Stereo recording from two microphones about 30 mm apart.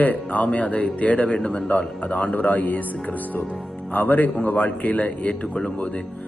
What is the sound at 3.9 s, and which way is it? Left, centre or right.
Speech, left.